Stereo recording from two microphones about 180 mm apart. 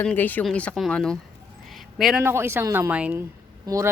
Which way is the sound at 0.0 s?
10° left (ahead or behind).